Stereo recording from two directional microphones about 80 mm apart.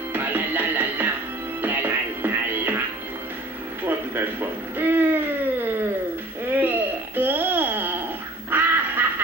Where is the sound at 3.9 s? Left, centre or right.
Right.